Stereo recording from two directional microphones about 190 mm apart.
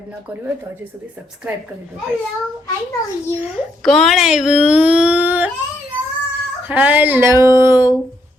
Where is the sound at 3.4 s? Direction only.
5° right (ahead or behind).